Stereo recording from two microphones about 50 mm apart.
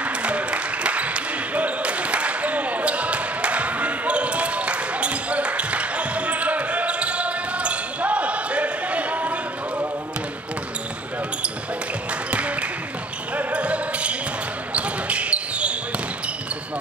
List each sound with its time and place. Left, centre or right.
0.0 s basketball bounce: right
12.3 s a sound: right
13.4 s basketball bounce: right